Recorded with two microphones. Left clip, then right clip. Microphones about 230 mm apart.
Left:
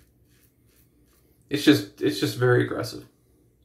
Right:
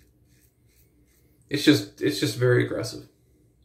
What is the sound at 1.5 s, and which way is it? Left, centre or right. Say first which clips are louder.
Speech: left 1 dB; centre.